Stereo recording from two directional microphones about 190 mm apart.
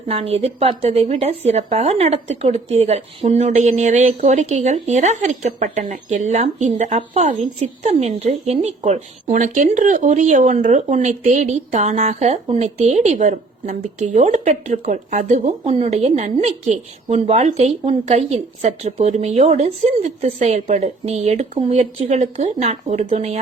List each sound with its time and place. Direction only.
0.1 s a woman's voice: 30° right (ahead or behind)